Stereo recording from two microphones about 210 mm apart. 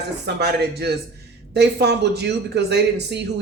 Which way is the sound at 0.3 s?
50° right (ahead or behind).